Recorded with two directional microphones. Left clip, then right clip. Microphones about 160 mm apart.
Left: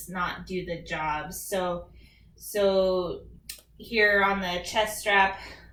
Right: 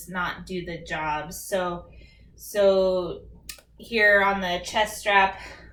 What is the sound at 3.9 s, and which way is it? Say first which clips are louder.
Speech: right 3 dB; 15° right (ahead or behind).